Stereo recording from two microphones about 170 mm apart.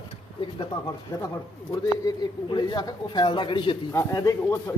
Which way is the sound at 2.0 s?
25° left (ahead or behind).